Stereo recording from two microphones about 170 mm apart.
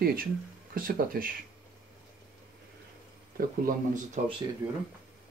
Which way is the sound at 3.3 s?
50° right (ahead or behind).